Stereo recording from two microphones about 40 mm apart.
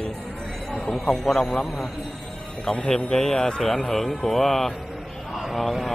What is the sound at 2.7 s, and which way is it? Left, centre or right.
A man's voice, centre.